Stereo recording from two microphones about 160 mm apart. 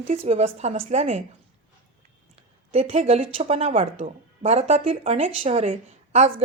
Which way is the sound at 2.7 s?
40° right (ahead or behind).